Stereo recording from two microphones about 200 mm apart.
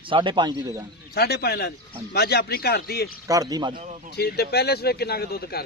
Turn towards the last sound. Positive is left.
turn(degrees=50)  # may be behind; listen again after turning